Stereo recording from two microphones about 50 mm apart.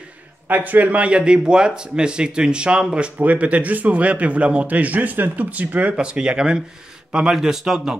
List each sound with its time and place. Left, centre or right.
0.5 s speech: right; by 3.1 s centre
3.2 s a man's voice: right
6.0 s a man's voice: centre